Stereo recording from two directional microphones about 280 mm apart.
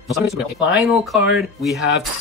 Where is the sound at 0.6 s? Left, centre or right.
Centre.